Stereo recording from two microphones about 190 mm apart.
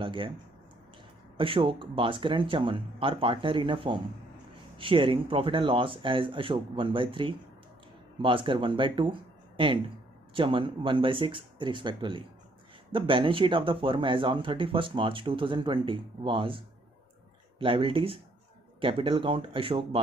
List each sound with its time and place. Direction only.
0.0 s speech: 25° right (ahead or behind)
1.3 s speech: 25° right (ahead or behind)